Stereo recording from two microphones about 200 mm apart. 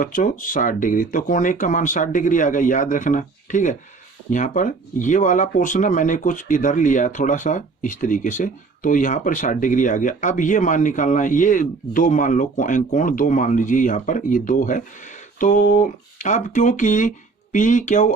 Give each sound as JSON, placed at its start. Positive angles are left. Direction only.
{"t": 0.0, "sound": "speech", "side_deg": 45}